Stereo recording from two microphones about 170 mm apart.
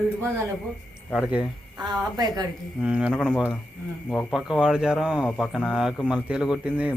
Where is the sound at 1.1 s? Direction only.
5° right (ahead or behind).